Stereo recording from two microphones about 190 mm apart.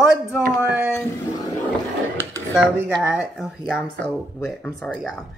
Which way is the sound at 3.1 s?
5° right (ahead or behind).